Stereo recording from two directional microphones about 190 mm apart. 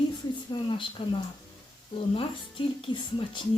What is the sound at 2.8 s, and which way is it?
Speech, 25° left (ahead or behind).